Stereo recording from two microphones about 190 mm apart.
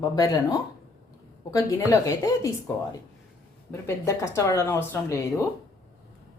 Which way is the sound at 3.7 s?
15° left (ahead or behind).